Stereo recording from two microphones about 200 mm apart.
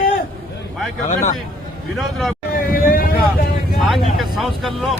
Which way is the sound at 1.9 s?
Centre (ahead or behind).